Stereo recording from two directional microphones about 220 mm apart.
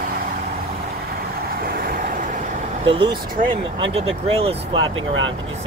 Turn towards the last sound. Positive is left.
turn(degrees=-25)  # may be behind; listen again after turning